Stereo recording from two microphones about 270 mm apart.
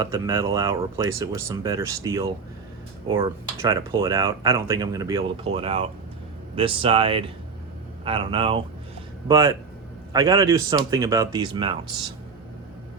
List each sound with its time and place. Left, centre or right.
0.0 s speech: centre